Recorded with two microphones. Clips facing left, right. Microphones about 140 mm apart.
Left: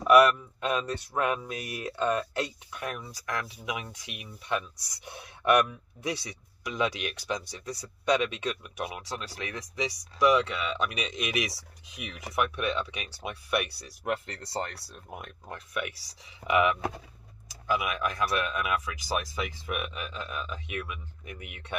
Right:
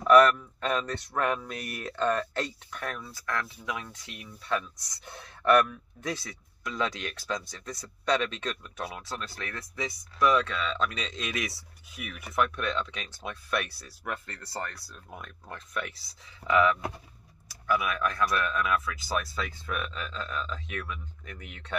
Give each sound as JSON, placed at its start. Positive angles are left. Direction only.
{"t": 0.0, "sound": "speech", "side_deg": 15}